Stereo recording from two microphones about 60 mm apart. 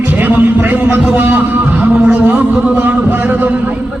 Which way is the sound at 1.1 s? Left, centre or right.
Right.